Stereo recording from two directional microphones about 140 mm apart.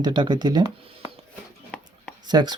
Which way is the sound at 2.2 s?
30° right (ahead or behind).